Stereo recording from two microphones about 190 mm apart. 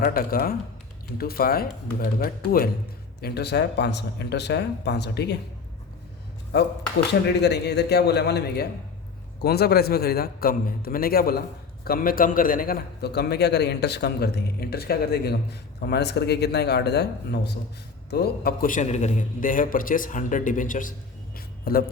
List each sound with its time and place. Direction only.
0.0 s a man's voice: 50° left (ahead or behind)
6.5 s a man's voice: 60° left (ahead or behind); by 20.9 s 45° left (ahead or behind)
21.3 s music: 50° left (ahead or behind)